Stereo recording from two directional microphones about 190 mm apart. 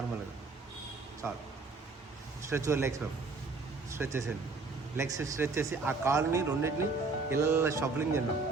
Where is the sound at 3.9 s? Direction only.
15° right (ahead or behind).